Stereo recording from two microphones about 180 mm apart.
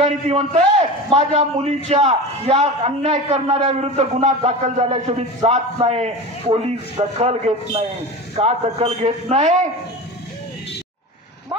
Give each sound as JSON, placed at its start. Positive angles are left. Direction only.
{"t": 0.0, "sound": "a man's voice", "side_deg": -35}